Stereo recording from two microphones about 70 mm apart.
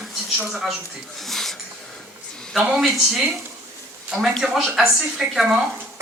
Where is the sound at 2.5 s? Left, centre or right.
Centre.